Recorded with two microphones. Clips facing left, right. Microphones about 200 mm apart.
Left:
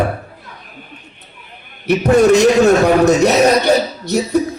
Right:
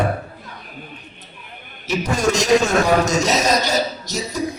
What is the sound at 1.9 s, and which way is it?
A man's voice, 60° left (ahead or behind).